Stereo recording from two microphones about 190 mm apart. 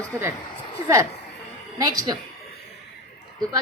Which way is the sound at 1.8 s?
20° right (ahead or behind).